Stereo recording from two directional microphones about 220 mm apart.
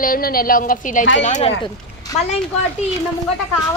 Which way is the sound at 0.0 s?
40° left (ahead or behind).